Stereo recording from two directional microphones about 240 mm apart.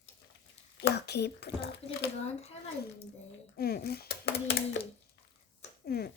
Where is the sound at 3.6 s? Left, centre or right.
Left.